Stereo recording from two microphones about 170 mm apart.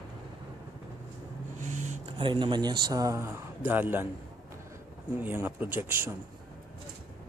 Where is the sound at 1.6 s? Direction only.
45° right (ahead or behind).